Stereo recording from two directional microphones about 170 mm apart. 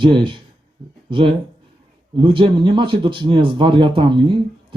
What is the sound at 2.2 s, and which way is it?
Speech, 30° right (ahead or behind).